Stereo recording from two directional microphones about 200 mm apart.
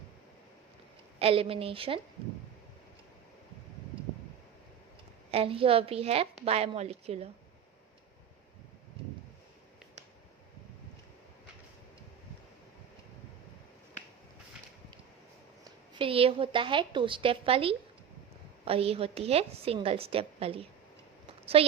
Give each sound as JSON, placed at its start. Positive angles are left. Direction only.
{"t": 1.2, "sound": "a woman's voice", "side_deg": -30}
{"t": 5.3, "sound": "a woman's voice", "side_deg": -30}
{"t": 15.6, "sound": "a woman's voice", "side_deg": -25}